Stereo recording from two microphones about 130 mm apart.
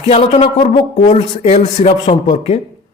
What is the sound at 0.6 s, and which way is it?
A man's voice, 75° left (ahead or behind).